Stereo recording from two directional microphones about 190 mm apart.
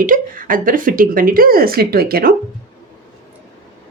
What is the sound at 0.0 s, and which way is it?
A woman's voice, 45° right (ahead or behind).